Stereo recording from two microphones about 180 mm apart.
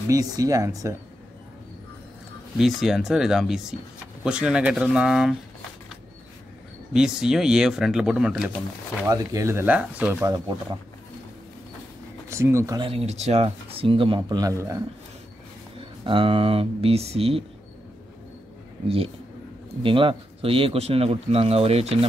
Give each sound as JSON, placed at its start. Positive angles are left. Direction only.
{"t": 0.1, "sound": "speech", "side_deg": -20}
{"t": 2.5, "sound": "speech", "side_deg": 0}
{"t": 6.9, "sound": "speech", "side_deg": -5}
{"t": 9.0, "sound": "speech", "side_deg": -20}
{"t": 10.2, "sound": "speech", "side_deg": -20}
{"t": 12.3, "sound": "speech", "side_deg": -15}
{"t": 15.8, "sound": "speech", "side_deg": -30}
{"t": 19.8, "sound": "speech", "side_deg": -30}